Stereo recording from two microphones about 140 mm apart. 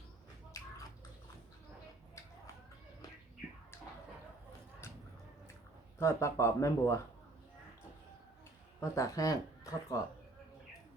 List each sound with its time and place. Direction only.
6.0 s speech: 20° left (ahead or behind)
8.8 s speech: 25° left (ahead or behind)